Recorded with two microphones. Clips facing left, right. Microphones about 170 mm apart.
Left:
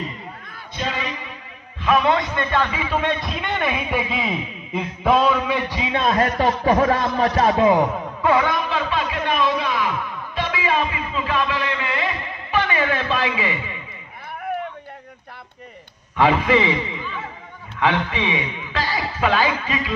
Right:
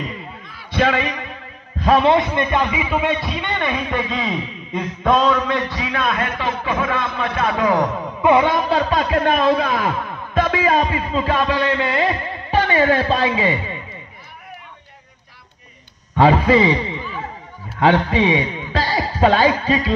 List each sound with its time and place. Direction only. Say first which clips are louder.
0.7 s a man's voice: right 9 dB; 65° right (ahead or behind)
1.8 s a man's voice: right 4 dB; 35° right (ahead or behind)
2.0 s a man's voice: right 4 dB; 20° right (ahead or behind); by 5.8 s 10° left (ahead or behind)
5.8 s a man's voice: even; 20° left (ahead or behind)
6.0 s speech: left 6 dB; 35° left (ahead or behind)
8.2 s a man's voice: right 4 dB; 20° right (ahead or behind); by 13.7 s 35° right (ahead or behind)
16.2 s a man's voice: right 4 dB; 35° right (ahead or behind)